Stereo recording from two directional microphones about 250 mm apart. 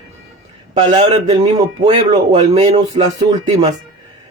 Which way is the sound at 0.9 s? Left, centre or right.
Right.